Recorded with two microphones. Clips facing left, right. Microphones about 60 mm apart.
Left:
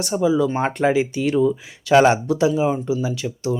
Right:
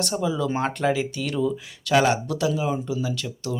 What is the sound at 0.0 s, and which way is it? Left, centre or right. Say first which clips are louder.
Speech: left 6 dB; centre.